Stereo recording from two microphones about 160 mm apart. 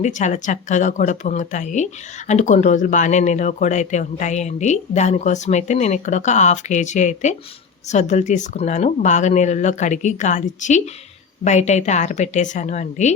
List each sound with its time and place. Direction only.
0.0 s speech: 50° left (ahead or behind)